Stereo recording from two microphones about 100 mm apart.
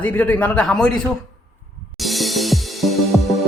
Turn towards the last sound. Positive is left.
turn(degrees=0)  # may be behind; listen again after turning